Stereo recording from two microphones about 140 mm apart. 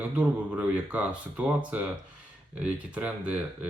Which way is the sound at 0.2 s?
10° right (ahead or behind).